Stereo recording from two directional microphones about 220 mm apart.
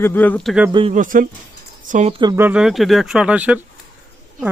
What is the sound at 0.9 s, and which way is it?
Speech, 35° right (ahead or behind).